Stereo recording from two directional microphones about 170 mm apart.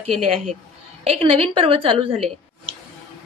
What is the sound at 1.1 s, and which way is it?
A woman's voice, 35° right (ahead or behind).